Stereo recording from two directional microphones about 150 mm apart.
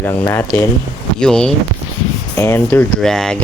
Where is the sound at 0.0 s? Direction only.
15° left (ahead or behind).